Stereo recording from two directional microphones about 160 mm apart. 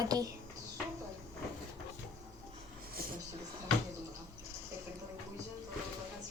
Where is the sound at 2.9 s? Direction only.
65° right (ahead or behind).